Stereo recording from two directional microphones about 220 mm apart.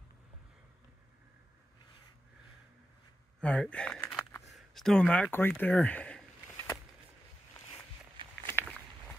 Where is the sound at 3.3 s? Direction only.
5° left (ahead or behind).